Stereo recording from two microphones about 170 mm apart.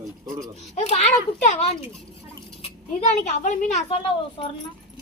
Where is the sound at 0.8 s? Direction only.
40° left (ahead or behind).